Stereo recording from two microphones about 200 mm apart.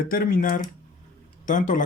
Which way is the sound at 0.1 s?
45° left (ahead or behind).